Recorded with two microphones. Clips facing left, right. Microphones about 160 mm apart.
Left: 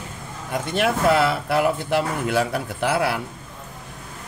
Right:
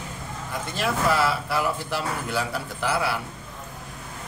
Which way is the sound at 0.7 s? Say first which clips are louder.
Left 5 dB; 65° left (ahead or behind).